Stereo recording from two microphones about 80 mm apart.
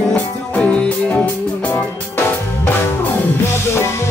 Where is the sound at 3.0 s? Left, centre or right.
Left.